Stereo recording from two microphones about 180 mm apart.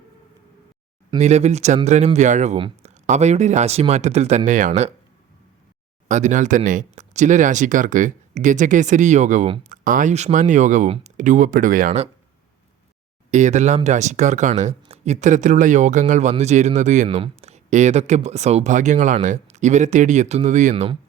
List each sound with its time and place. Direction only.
1.2 s speech: 40° right (ahead or behind)
6.1 s speech: 40° right (ahead or behind)
13.3 s speech: 40° right (ahead or behind)